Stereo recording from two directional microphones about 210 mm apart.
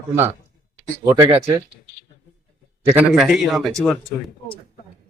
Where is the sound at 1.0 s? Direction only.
15° right (ahead or behind).